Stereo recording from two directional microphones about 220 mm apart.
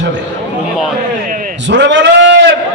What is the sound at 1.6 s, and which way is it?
Speech, 55° right (ahead or behind).